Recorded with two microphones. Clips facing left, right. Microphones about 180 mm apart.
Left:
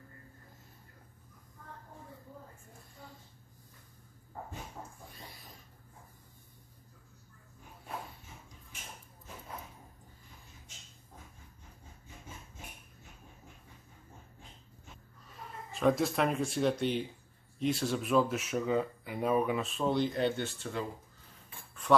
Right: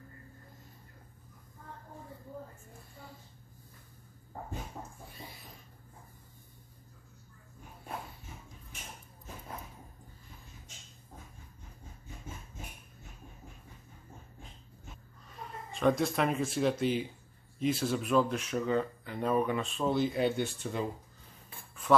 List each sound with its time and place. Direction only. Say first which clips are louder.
15.7 s speech: even; centre (ahead or behind); by 20.8 s 15° right (ahead or behind)